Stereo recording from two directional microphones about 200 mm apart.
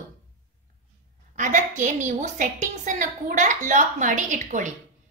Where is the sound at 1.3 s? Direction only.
40° right (ahead or behind).